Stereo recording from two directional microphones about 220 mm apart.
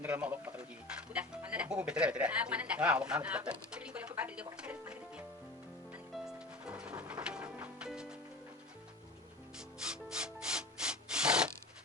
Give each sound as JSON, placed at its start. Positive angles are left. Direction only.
{"t": 0.0, "sound": "speech", "side_deg": -5}
{"t": 6.1, "sound": "music", "side_deg": -5}
{"t": 9.6, "sound": "rub", "side_deg": -5}